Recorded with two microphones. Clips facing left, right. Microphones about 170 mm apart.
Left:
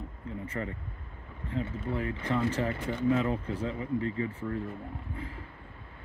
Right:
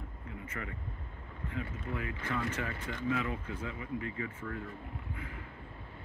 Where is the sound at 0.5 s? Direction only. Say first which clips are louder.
Left 5 dB; 35° left (ahead or behind).